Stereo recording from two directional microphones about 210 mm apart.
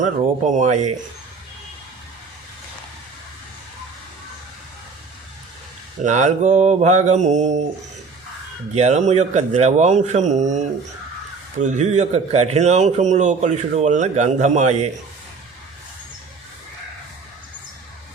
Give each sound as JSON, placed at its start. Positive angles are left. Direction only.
{"t": 0.0, "sound": "a man's voice", "side_deg": -35}
{"t": 6.0, "sound": "a man's voice", "side_deg": -35}
{"t": 8.7, "sound": "a man's voice", "side_deg": -30}